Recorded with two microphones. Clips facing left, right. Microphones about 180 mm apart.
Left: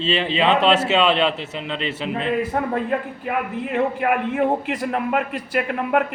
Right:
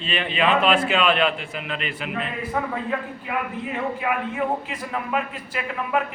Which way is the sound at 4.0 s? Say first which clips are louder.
Left 5 dB; 55° left (ahead or behind).